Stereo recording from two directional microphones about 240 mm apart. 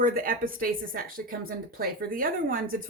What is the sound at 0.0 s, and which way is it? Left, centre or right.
A woman's voice, right.